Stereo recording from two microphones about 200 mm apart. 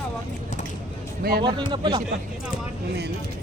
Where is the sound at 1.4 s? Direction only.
25° right (ahead or behind).